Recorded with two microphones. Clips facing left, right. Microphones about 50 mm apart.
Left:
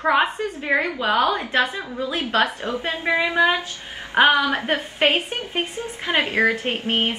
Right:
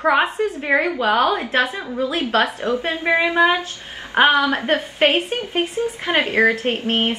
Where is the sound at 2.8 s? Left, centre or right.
Right.